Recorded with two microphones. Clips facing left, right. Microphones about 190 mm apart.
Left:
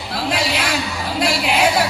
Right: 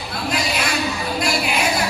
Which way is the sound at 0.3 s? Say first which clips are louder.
Left 2 dB; 65° left (ahead or behind).